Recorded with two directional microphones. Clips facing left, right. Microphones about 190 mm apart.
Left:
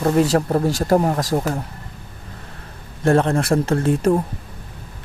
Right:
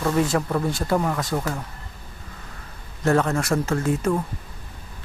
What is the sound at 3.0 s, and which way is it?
Speech, 30° left (ahead or behind).